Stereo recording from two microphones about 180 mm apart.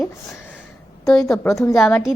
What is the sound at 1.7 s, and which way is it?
Speech, centre (ahead or behind).